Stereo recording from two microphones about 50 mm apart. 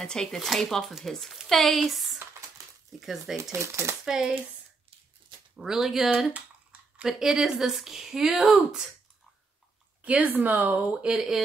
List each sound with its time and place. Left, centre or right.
0.0 s speech: centre
3.5 s speech: right
4.0 s speech: centre
5.6 s speech: centre
6.0 s speech: right
7.1 s speech: centre
10.0 s speech: right
11.1 s speech: centre